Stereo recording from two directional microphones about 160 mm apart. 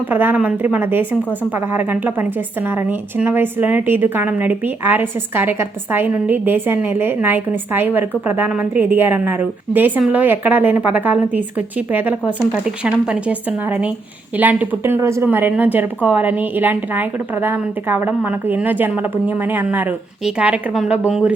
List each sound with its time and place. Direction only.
0.1 s a woman's voice: 10° right (ahead or behind)